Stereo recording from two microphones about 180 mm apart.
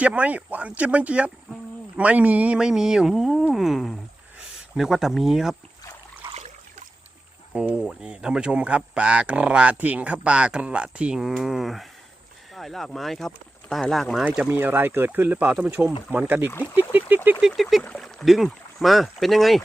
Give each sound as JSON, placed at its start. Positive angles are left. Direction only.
{"t": 0.0, "sound": "speech", "side_deg": -5}
{"t": 6.2, "sound": "a sound", "side_deg": -35}
{"t": 7.5, "sound": "speech", "side_deg": -5}
{"t": 14.3, "sound": "speech", "side_deg": -10}
{"t": 16.5, "sound": "speech", "side_deg": 10}
{"t": 16.7, "sound": "speech", "side_deg": -10}